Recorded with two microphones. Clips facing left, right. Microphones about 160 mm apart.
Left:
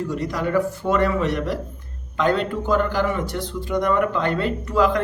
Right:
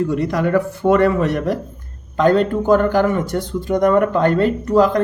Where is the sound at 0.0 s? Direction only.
60° right (ahead or behind).